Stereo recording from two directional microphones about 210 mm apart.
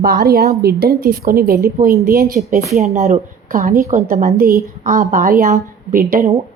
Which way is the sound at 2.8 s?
30° right (ahead or behind).